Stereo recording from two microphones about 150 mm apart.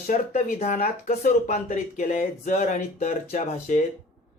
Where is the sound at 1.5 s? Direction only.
65° left (ahead or behind); by 3.8 s 50° left (ahead or behind).